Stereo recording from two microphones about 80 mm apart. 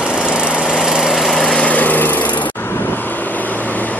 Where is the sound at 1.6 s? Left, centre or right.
Centre.